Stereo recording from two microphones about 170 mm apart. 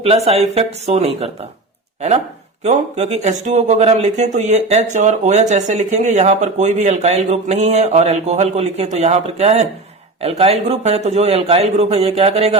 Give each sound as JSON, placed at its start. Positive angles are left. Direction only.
{"t": 0.3, "sound": "speech", "side_deg": -40}
{"t": 2.6, "sound": "speech", "side_deg": -40}